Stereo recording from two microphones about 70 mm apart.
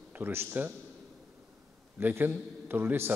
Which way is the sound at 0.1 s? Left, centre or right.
Right.